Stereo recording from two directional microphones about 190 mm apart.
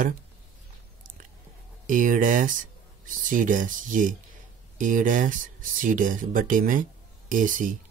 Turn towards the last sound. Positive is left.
turn(degrees=-45)  # may be behind; listen again after turning